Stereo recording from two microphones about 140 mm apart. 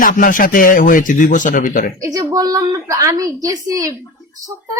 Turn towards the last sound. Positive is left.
turn(degrees=-25)  # may be behind; listen again after turning